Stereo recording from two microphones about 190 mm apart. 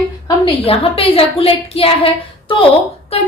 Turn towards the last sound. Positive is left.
turn(degrees=30)  # may be behind; listen again after turning